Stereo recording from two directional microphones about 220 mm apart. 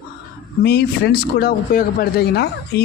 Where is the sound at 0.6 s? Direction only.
45° left (ahead or behind).